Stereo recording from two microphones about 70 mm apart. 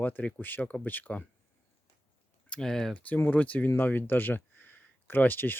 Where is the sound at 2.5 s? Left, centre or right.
Centre.